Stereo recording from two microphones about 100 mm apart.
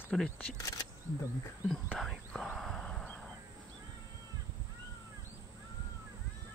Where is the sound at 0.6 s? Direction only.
35° left (ahead or behind).